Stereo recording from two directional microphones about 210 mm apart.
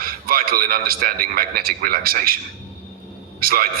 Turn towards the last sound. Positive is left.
turn(degrees=-45)  # may be behind; listen again after turning